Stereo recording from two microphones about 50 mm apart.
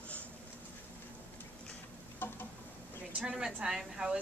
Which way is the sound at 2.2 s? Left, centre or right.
Left.